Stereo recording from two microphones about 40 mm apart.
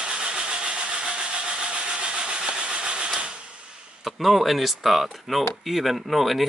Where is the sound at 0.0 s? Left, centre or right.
Right.